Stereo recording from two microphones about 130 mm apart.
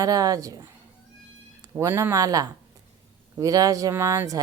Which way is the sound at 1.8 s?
20° right (ahead or behind).